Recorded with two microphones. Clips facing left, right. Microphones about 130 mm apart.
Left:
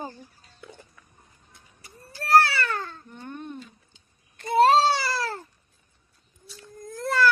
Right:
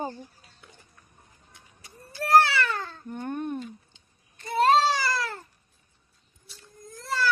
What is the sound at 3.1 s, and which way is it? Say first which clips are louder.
Speech: right 12 dB; 50° right (ahead or behind).